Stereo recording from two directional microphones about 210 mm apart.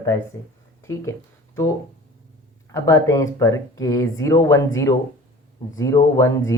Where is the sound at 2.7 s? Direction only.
15° left (ahead or behind).